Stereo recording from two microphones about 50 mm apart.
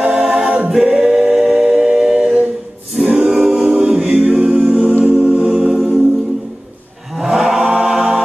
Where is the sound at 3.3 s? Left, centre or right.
Centre.